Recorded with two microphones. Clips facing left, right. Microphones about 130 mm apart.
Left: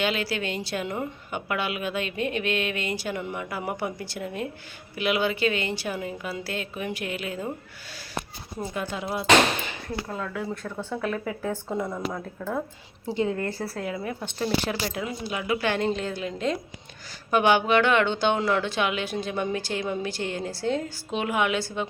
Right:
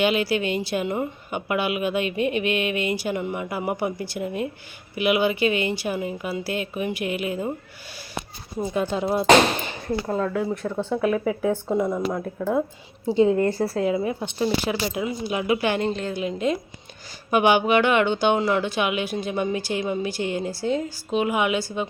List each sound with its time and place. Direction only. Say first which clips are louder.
0.0 s speech: right 6 dB; 15° right (ahead or behind)
8.7 s a woman's voice: right 8 dB; 25° right (ahead or behind)
10.4 s a woman's voice: right 6 dB; 15° right (ahead or behind)
15.8 s a woman's voice: right 2 dB; centre (ahead or behind)